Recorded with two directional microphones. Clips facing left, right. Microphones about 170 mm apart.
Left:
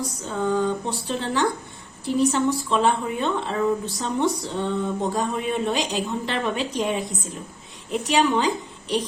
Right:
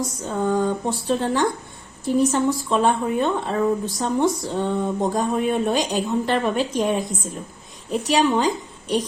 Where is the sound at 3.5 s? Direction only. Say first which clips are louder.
Right 2 dB; 45° right (ahead or behind).